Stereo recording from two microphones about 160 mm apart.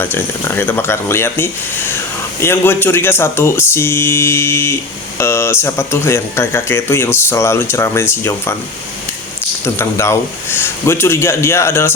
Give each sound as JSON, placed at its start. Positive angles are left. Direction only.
{"t": 0.0, "sound": "speech", "side_deg": 15}
{"t": 9.6, "sound": "speech", "side_deg": 15}